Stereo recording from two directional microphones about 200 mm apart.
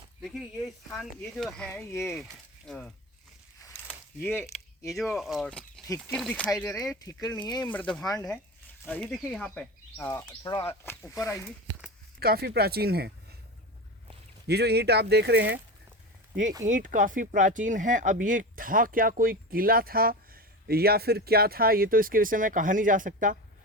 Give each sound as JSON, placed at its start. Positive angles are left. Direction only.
{"t": 0.2, "sound": "speech", "side_deg": 0}
{"t": 2.0, "sound": "speech", "side_deg": 0}
{"t": 3.6, "sound": "a sound", "side_deg": 15}
{"t": 4.2, "sound": "speech", "side_deg": 10}
{"t": 4.9, "sound": "speech", "side_deg": 0}
{"t": 7.7, "sound": "speech", "side_deg": 5}
{"t": 8.0, "sound": "speech", "side_deg": 20}
{"t": 8.9, "sound": "speech", "side_deg": 5}
{"t": 12.2, "sound": "speech", "side_deg": -50}
{"t": 14.4, "sound": "speech", "side_deg": -55}
{"t": 16.6, "sound": "speech", "side_deg": -40}